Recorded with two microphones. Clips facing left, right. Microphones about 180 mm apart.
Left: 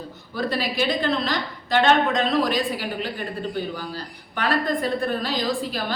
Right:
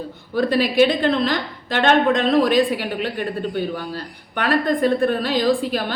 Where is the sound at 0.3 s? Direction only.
55° right (ahead or behind).